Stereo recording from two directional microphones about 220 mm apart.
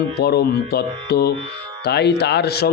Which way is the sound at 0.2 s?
45° left (ahead or behind).